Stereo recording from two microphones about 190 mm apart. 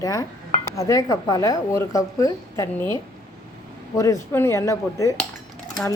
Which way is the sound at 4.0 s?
15° left (ahead or behind).